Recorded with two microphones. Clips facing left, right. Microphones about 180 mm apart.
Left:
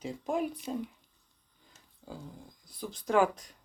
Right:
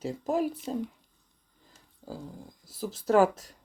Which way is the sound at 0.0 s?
5° right (ahead or behind).